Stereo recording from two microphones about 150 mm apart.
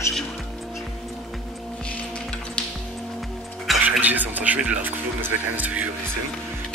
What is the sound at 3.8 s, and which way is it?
Speech, 10° right (ahead or behind).